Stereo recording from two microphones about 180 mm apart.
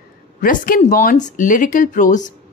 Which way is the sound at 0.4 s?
50° left (ahead or behind).